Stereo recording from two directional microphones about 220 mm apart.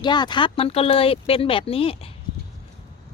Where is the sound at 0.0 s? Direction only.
20° left (ahead or behind).